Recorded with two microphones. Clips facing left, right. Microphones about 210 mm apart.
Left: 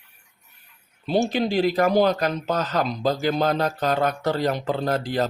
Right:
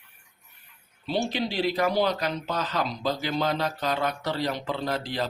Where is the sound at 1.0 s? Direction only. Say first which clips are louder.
Left 6 dB; 45° left (ahead or behind).